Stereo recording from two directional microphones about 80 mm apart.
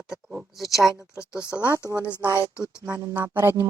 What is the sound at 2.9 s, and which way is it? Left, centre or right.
Speech, right.